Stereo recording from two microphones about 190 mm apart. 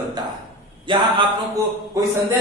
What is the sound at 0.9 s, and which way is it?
Speech, 25° right (ahead or behind).